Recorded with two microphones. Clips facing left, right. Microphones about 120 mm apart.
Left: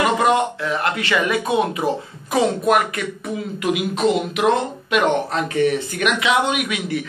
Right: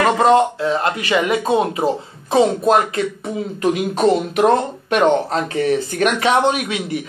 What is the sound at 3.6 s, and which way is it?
Speech, 40° right (ahead or behind).